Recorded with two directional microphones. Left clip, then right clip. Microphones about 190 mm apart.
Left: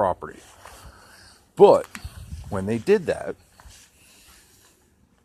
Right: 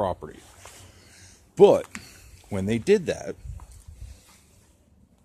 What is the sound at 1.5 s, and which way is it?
Speech, 10° right (ahead or behind).